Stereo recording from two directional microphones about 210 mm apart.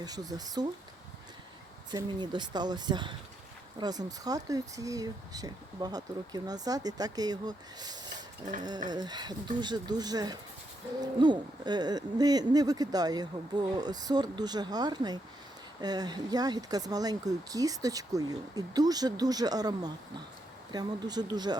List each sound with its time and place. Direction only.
0.0 s speech: 20° right (ahead or behind)
1.9 s speech: 20° right (ahead or behind)